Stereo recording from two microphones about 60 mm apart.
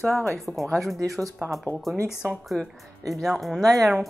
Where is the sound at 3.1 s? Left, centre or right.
Centre.